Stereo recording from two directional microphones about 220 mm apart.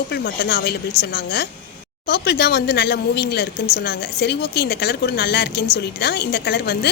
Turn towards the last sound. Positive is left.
turn(degrees=50)  # may be behind; listen again after turning